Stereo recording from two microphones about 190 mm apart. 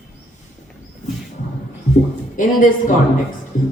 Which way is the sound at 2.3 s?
45° left (ahead or behind).